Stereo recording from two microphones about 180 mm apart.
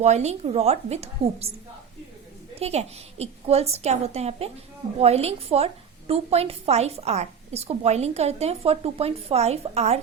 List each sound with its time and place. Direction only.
0.0 s a woman's voice: 40° right (ahead or behind)
2.6 s a woman's voice: 35° right (ahead or behind)